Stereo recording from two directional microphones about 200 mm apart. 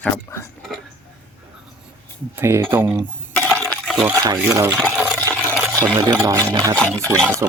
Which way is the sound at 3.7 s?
Centre (ahead or behind).